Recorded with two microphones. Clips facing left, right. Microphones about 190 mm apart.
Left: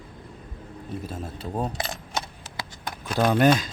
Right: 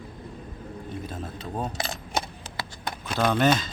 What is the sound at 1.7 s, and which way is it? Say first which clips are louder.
Speech: left 1 dB; 20° left (ahead or behind).